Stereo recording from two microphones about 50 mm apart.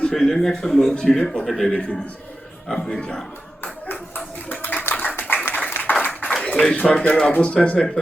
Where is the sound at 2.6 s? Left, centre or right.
Centre.